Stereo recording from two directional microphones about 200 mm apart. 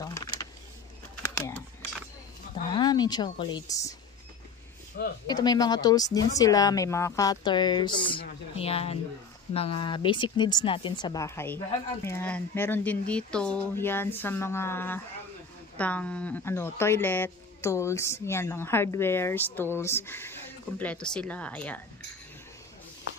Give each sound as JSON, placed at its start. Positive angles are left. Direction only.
{"t": 0.0, "sound": "vehicle", "side_deg": 20}
{"t": 2.7, "sound": "speech", "side_deg": 20}
{"t": 5.3, "sound": "a woman's voice", "side_deg": 20}